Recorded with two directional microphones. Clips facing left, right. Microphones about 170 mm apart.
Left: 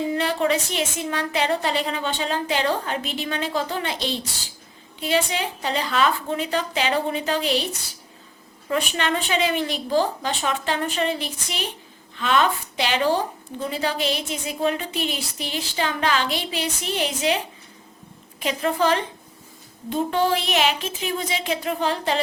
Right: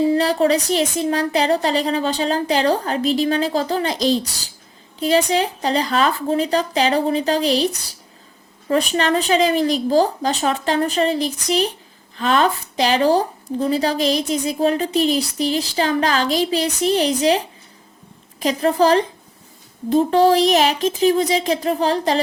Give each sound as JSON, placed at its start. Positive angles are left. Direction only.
{"t": 0.0, "sound": "a woman's voice", "side_deg": -35}